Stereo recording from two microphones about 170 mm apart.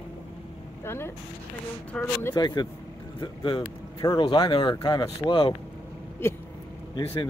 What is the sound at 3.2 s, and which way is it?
Speech, 30° left (ahead or behind).